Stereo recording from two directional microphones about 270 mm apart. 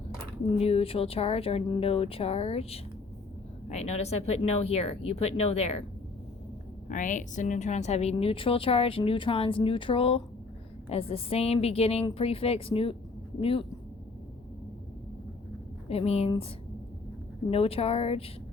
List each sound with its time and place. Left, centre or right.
0.6 s a woman's voice: left
6.8 s a woman's voice: left
15.9 s a woman's voice: left
17.5 s a woman's voice: left